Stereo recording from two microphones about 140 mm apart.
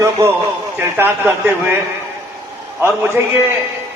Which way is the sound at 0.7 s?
15° right (ahead or behind).